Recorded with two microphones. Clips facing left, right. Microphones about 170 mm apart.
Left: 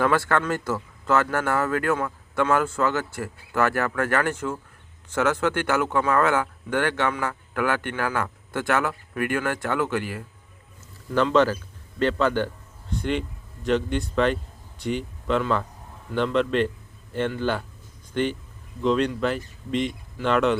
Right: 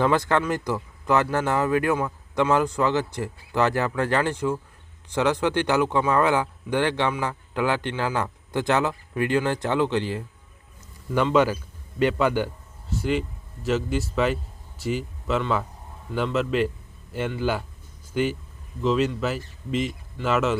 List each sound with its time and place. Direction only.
0.0 s speech: 20° right (ahead or behind)
11.1 s a man's voice: 10° right (ahead or behind)